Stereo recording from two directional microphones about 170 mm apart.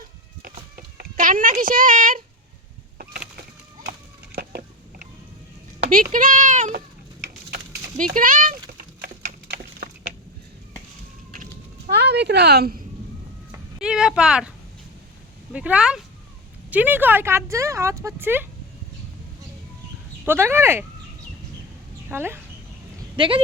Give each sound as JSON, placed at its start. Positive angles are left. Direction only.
{"t": 0.8, "sound": "speech", "side_deg": -55}
{"t": 5.8, "sound": "speech", "side_deg": -50}
{"t": 7.9, "sound": "speech", "side_deg": -50}
{"t": 11.9, "sound": "speech", "side_deg": -80}
{"t": 13.7, "sound": "speech", "side_deg": -5}
{"t": 15.5, "sound": "speech", "side_deg": -5}
{"t": 20.2, "sound": "speech", "side_deg": -15}
{"t": 22.1, "sound": "speech", "side_deg": -15}
{"t": 23.1, "sound": "speech", "side_deg": -30}